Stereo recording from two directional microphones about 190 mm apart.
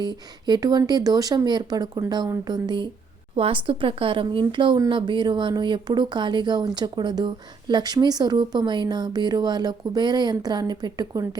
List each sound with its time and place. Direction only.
0.0 s speech: 20° right (ahead or behind)